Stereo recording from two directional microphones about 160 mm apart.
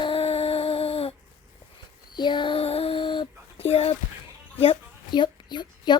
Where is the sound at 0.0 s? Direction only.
35° left (ahead or behind).